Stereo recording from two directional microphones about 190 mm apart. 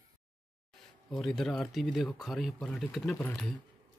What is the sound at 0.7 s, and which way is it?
Speech, centre (ahead or behind).